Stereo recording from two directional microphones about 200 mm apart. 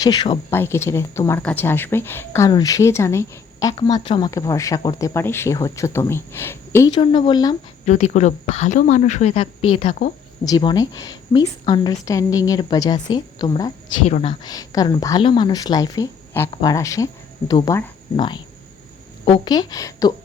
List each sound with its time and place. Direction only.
0.0 s a woman's voice: 20° left (ahead or behind)
6.9 s a woman's voice: 25° left (ahead or behind)
7.9 s a woman's voice: 35° left (ahead or behind)
14.0 s a woman's voice: 30° left (ahead or behind)
14.4 s a woman's voice: 20° left (ahead or behind)